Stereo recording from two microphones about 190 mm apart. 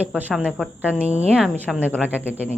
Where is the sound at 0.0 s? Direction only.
10° right (ahead or behind).